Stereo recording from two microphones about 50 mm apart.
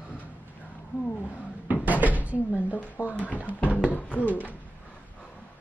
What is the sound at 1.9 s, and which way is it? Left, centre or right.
Cupboard open or close, right.